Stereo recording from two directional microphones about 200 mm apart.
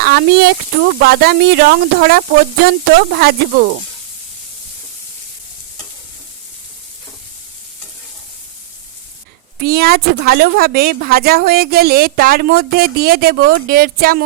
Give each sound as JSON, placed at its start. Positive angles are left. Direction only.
{"t": 0.0, "sound": "speech", "side_deg": -50}
{"t": 9.6, "sound": "speech", "side_deg": -50}